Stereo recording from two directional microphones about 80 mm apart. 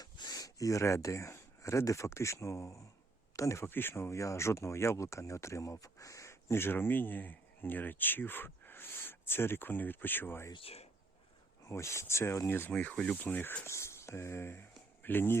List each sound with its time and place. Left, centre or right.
0.0 s speech: left
3.7 s speech: left
11.7 s speech: left
12.7 s speech: centre
13.7 s speech: left